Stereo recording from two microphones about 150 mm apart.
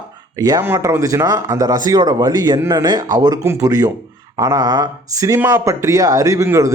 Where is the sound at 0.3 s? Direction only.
25° right (ahead or behind).